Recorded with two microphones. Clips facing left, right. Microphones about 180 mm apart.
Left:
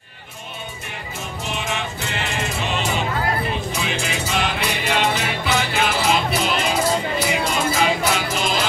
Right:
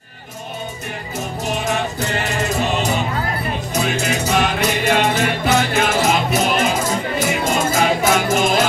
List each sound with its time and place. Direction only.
1.4 s music: 40° right (ahead or behind)